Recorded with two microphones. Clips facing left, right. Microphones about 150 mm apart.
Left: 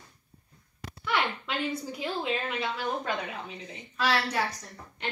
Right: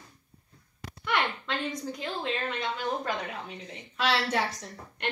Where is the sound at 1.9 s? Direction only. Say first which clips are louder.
Left 1 dB; 5° left (ahead or behind).